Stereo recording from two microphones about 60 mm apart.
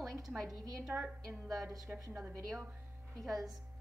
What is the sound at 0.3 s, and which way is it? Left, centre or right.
A woman's voice, centre.